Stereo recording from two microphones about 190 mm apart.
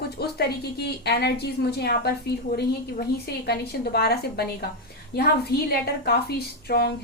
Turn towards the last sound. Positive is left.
turn(degrees=55)  # may be behind; listen again after turning